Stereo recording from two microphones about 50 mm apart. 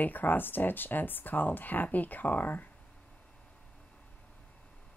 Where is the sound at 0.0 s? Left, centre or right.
Left.